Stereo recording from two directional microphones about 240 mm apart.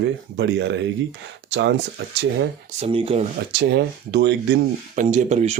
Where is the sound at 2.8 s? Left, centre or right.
Right.